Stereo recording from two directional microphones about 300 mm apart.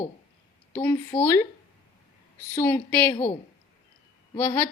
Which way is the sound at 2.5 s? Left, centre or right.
Centre.